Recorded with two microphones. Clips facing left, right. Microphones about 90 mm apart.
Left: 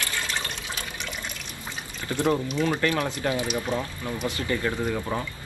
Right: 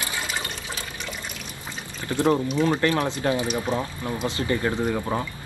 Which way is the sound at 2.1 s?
20° right (ahead or behind).